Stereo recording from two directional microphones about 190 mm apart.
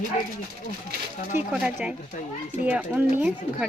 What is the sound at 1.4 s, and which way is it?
Speech, 10° right (ahead or behind).